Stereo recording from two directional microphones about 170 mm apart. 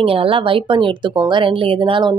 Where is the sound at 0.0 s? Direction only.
35° right (ahead or behind).